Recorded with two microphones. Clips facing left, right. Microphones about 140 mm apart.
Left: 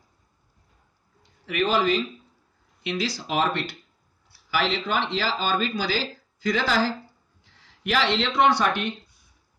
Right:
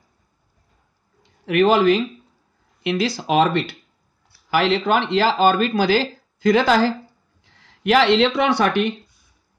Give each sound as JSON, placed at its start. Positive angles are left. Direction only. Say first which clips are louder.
{"t": 1.4, "sound": "speech", "louder": "right 8 dB", "side_deg": -65}
{"t": 4.5, "sound": "speech", "louder": "right 8 dB", "side_deg": -60}